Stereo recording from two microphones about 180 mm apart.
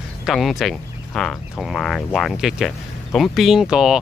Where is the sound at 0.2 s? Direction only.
Centre (ahead or behind).